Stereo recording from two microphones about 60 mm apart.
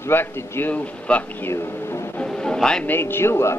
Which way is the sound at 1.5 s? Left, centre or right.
Left.